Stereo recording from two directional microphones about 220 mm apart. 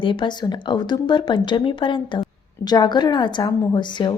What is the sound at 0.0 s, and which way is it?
A woman's voice, 20° left (ahead or behind).